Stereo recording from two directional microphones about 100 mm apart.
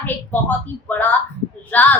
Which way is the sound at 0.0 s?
15° left (ahead or behind).